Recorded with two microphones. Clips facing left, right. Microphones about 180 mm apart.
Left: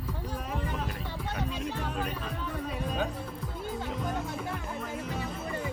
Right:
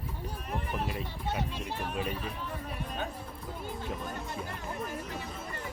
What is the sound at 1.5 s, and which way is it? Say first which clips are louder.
Speech: left 3 dB; 90° left.